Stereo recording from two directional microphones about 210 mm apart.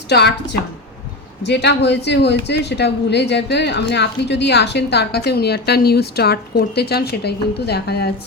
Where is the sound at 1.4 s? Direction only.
55° left (ahead or behind).